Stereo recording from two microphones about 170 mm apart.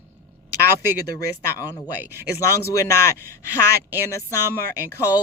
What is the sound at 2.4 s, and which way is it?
Speech, 20° left (ahead or behind).